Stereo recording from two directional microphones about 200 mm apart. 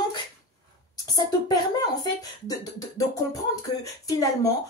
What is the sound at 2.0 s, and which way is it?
Speech, 20° left (ahead or behind).